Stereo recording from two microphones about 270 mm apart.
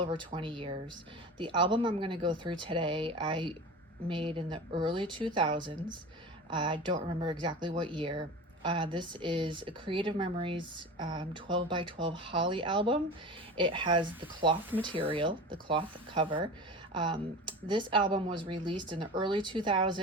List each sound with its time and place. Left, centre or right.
0.0 s speech: centre